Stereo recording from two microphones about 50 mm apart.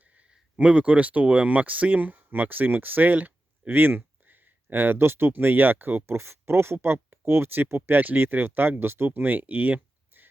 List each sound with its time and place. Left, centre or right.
0.5 s speech: right
6.1 s speech: right